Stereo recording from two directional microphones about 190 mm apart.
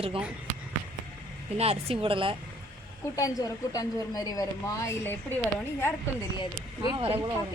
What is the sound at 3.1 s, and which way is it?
A woman's voice, 20° left (ahead or behind).